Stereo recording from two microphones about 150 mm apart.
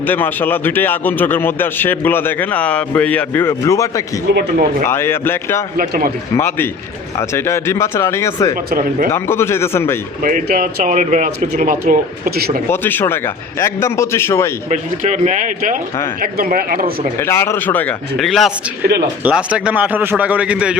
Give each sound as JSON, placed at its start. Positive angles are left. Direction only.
{"t": 0.0, "sound": "a man's voice", "side_deg": 10}
{"t": 4.4, "sound": "speech", "side_deg": -90}
{"t": 4.9, "sound": "a man's voice", "side_deg": 15}
{"t": 5.7, "sound": "a man's voice", "side_deg": -80}
{"t": 6.3, "sound": "a man's voice", "side_deg": 15}
{"t": 8.7, "sound": "speech", "side_deg": -65}
{"t": 9.1, "sound": "a man's voice", "side_deg": 15}
{"t": 10.2, "sound": "speech", "side_deg": -60}
{"t": 12.6, "sound": "a man's voice", "side_deg": 15}
{"t": 14.7, "sound": "speech", "side_deg": -50}
{"t": 16.2, "sound": "speech", "side_deg": -70}
{"t": 17.2, "sound": "a man's voice", "side_deg": 15}
{"t": 18.2, "sound": "a man's voice", "side_deg": 0}